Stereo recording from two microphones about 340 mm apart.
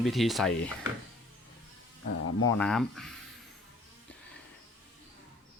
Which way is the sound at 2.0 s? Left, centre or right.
Left.